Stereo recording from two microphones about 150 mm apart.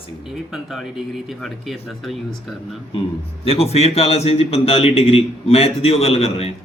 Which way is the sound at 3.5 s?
40° left (ahead or behind).